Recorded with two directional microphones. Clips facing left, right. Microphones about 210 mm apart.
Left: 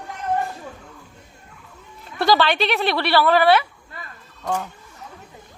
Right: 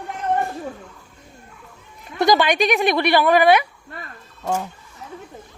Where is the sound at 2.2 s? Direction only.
15° right (ahead or behind).